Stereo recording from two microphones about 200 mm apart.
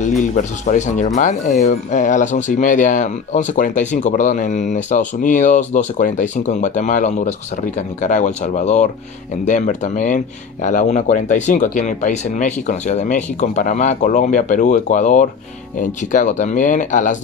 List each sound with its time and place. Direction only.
0.0 s speech: 40° left (ahead or behind)